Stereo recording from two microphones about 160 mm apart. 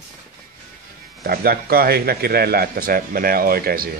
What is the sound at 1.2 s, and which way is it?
A man's voice, 70° right (ahead or behind).